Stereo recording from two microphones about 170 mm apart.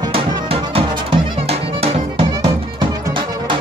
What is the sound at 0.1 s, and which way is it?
Music, 35° right (ahead or behind).